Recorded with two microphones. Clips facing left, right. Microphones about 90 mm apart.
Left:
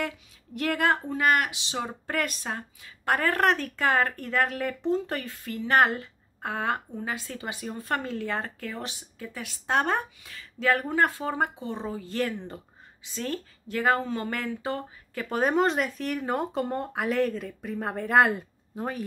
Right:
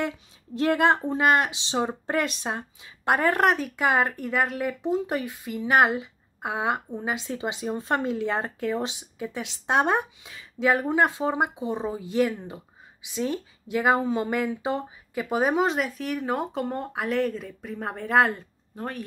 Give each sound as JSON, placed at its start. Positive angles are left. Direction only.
{"t": 0.6, "sound": "speech", "side_deg": -25}